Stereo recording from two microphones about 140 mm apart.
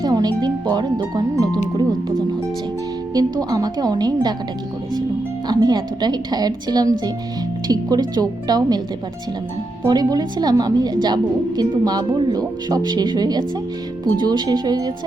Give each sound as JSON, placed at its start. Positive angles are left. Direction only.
{"t": 0.0, "sound": "music", "side_deg": -30}
{"t": 3.2, "sound": "a woman's voice", "side_deg": -25}
{"t": 5.5, "sound": "a woman's voice", "side_deg": -30}
{"t": 9.8, "sound": "a woman's voice", "side_deg": -30}